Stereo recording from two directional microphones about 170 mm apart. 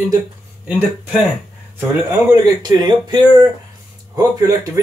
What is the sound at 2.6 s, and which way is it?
Speech, 25° right (ahead or behind).